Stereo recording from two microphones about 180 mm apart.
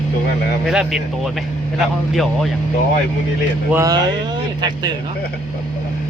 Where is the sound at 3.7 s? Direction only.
20° right (ahead or behind).